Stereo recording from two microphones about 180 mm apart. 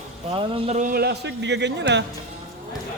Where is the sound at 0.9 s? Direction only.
65° right (ahead or behind).